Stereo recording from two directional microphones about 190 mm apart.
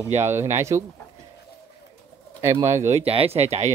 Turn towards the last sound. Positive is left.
turn(degrees=-35)  # may be behind; listen again after turning